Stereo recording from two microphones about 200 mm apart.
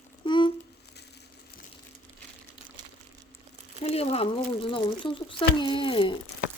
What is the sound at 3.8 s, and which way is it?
Speech, 30° left (ahead or behind).